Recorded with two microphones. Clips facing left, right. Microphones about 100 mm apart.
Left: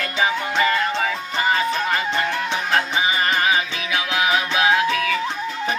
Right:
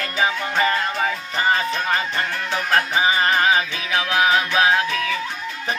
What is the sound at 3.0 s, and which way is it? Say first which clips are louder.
Music: right 2 dB; 35° right (ahead or behind).